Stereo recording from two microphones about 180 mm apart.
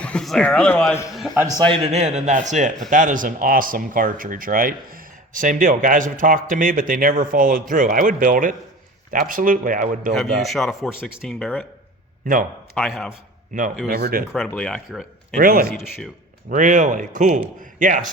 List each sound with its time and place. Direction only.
0.0 s a man's voice: 5° left (ahead or behind)
1.4 s a man's voice: 20° right (ahead or behind); by 10.2 s 50° right (ahead or behind)
10.2 s speech: centre (ahead or behind)
12.2 s a man's voice: 50° right (ahead or behind)
12.7 s speech: centre (ahead or behind)
13.8 s speech: 55° right (ahead or behind)
14.3 s speech: 5° left (ahead or behind)
15.4 s speech: 55° right (ahead or behind)